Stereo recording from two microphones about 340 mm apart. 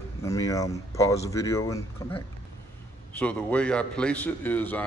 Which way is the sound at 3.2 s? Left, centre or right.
Centre.